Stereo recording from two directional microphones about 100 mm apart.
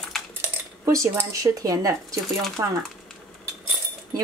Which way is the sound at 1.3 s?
35° right (ahead or behind).